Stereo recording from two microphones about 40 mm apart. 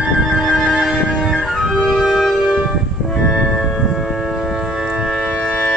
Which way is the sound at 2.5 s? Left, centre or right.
Centre.